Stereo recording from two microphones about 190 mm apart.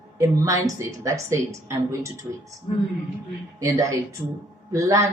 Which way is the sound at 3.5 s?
20° right (ahead or behind).